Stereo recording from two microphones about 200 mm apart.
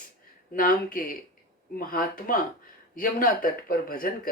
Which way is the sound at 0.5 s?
45° left (ahead or behind).